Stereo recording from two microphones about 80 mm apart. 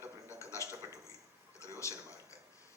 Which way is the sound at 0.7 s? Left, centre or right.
Right.